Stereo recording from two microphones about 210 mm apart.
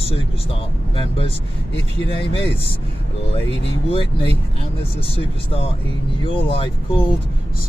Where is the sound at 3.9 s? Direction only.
25° left (ahead or behind).